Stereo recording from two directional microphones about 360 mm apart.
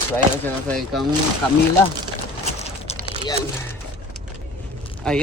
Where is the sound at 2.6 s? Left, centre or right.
Centre.